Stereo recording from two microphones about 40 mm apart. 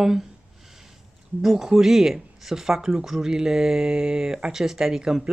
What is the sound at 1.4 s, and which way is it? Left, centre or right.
Speech, centre.